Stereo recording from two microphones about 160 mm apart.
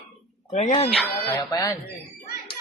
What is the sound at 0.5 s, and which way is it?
Speech, 45° left (ahead or behind).